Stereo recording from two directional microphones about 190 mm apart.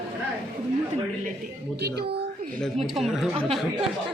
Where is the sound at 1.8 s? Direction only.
60° right (ahead or behind).